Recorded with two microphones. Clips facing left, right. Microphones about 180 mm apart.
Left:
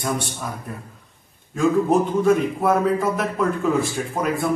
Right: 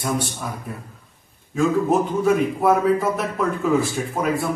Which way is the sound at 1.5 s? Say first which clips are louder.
Left 1 dB; 5° right (ahead or behind).